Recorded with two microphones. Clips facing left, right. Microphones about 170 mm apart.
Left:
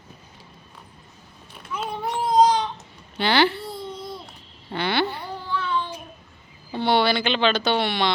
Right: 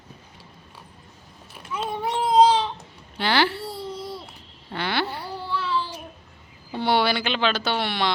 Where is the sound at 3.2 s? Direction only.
Centre (ahead or behind).